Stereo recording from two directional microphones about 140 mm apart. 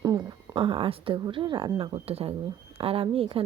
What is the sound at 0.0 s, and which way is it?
Speech, 30° right (ahead or behind).